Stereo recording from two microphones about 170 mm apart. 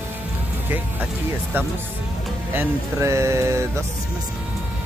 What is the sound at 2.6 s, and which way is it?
Speech, 15° right (ahead or behind).